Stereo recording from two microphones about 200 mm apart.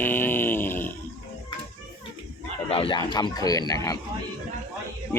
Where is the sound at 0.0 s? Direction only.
10° left (ahead or behind).